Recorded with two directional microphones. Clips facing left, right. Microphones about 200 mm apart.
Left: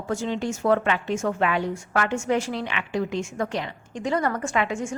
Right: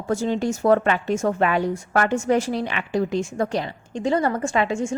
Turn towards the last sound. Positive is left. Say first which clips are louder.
# right 4 dB
turn(degrees=-25)  # may be behind; listen again after turning